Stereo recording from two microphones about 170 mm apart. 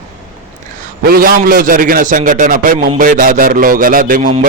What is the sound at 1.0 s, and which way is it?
A man's voice, 60° right (ahead or behind).